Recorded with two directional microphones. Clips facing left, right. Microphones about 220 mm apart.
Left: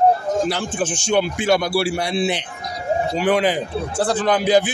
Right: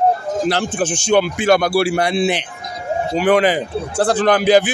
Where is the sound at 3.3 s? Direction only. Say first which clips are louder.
Right 5 dB; 85° right.